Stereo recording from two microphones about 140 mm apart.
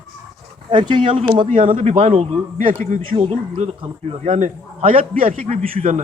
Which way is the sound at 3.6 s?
45° right (ahead or behind).